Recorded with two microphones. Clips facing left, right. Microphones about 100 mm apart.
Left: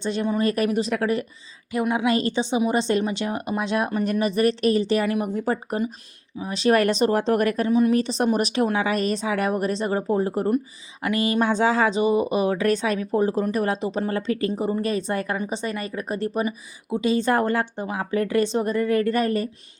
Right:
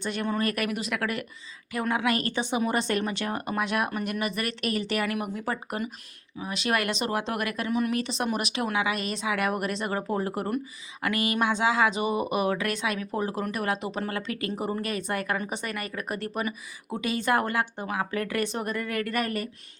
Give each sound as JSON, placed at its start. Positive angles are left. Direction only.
{"t": 0.0, "sound": "a woman's voice", "side_deg": 25}